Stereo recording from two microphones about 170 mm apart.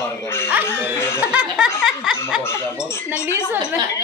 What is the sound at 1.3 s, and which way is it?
Speech, 5° right (ahead or behind).